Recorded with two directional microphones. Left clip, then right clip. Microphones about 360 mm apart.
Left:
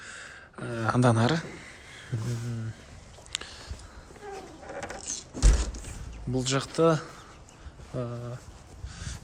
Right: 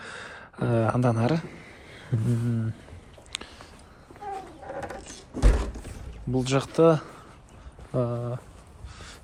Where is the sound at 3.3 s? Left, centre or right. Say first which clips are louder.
Left 1 dB; centre.